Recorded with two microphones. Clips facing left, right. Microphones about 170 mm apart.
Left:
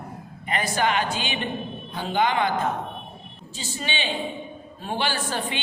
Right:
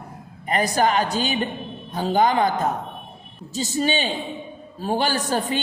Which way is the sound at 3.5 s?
40° right (ahead or behind).